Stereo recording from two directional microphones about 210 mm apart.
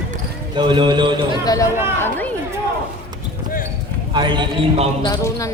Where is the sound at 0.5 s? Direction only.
20° right (ahead or behind).